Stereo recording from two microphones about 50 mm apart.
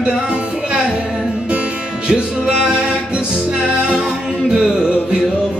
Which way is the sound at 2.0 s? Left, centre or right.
Centre.